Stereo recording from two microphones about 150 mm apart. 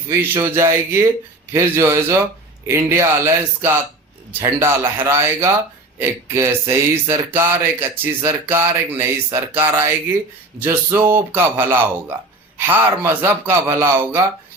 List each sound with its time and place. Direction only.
0.1 s a man's voice: 20° right (ahead or behind)